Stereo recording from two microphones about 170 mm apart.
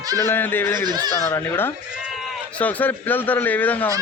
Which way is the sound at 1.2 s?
15° left (ahead or behind).